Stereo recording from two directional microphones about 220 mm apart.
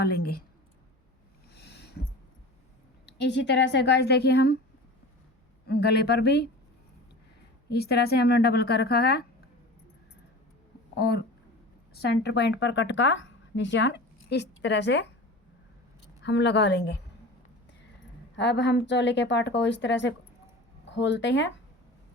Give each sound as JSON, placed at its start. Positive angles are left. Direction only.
{"t": 0.0, "sound": "a woman's voice", "side_deg": 45}
{"t": 1.5, "sound": "a sound", "side_deg": 50}
{"t": 3.2, "sound": "a woman's voice", "side_deg": 50}
{"t": 5.6, "sound": "a woman's voice", "side_deg": 45}
{"t": 7.7, "sound": "a woman's voice", "side_deg": 45}
{"t": 10.9, "sound": "speech", "side_deg": 45}
{"t": 16.2, "sound": "a woman's voice", "side_deg": 50}
{"t": 18.3, "sound": "a woman's voice", "side_deg": 50}